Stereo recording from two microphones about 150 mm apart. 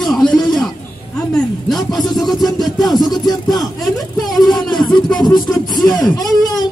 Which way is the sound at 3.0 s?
25° left (ahead or behind).